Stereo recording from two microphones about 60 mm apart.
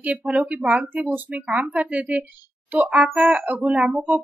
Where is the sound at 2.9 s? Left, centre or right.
Centre.